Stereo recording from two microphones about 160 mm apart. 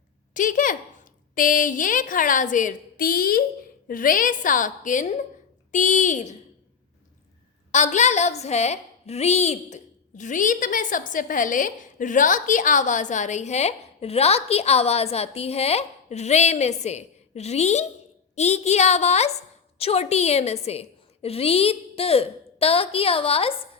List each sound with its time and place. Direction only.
0.3 s a woman's voice: 55° left (ahead or behind)
7.7 s a woman's voice: 45° left (ahead or behind)